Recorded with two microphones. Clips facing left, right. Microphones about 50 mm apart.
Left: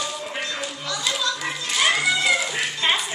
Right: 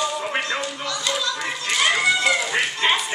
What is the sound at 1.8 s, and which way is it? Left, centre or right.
Cat, centre.